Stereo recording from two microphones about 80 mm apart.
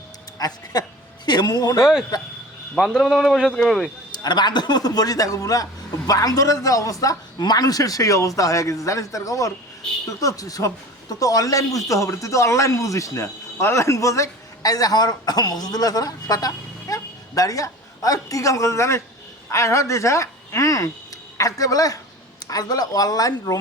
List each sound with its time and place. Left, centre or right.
0.3 s a man's voice: left
2.7 s speech: centre
4.1 s a man's voice: left